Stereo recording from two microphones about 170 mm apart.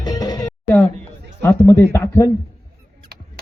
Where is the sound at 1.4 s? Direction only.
10° left (ahead or behind).